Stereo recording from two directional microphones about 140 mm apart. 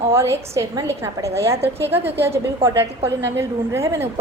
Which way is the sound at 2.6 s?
40° right (ahead or behind).